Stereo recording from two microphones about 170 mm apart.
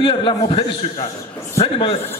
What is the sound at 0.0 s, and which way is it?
A man's voice, 30° left (ahead or behind).